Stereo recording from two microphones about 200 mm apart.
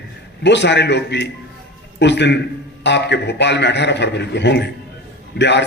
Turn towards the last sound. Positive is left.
turn(degrees=60)  # may be behind; listen again after turning